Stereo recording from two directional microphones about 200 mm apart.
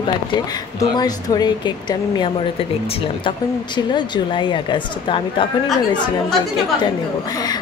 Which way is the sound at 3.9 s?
20° left (ahead or behind).